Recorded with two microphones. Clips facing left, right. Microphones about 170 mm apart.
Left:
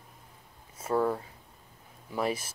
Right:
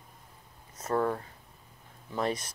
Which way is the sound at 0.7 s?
10° left (ahead or behind).